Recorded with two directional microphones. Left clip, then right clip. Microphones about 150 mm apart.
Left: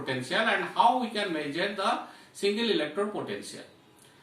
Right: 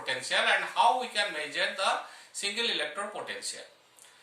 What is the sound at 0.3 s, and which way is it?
Speech, 10° right (ahead or behind).